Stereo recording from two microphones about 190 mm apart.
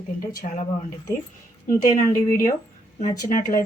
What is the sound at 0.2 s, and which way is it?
Speech, 50° left (ahead or behind).